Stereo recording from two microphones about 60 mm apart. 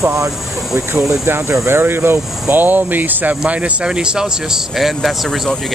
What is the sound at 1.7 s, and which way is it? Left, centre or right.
Speech, right.